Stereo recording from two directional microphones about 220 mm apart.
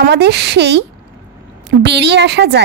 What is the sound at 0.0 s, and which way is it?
A woman's voice, 50° right (ahead or behind).